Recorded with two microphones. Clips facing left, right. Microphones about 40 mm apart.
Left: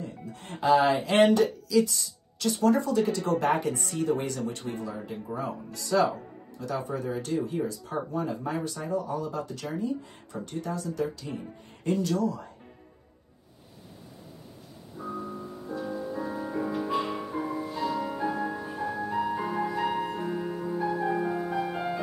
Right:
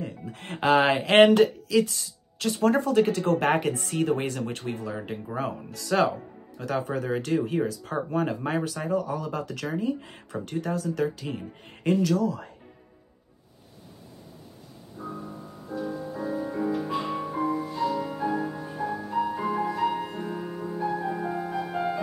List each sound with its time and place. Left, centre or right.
0.0 s speech: right
15.0 s music: centre